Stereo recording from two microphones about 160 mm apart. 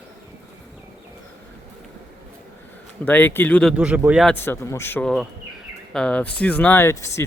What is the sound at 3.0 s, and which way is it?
Speech, 10° left (ahead or behind).